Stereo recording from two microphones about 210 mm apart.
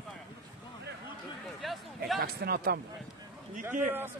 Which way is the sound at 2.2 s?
45° right (ahead or behind).